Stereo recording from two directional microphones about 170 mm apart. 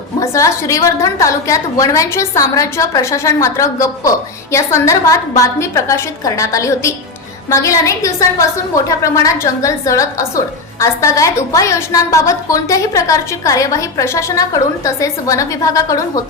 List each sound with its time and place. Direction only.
0.2 s a woman's voice: 20° left (ahead or behind)